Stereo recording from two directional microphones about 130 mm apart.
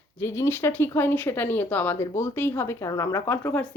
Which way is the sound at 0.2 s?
20° left (ahead or behind).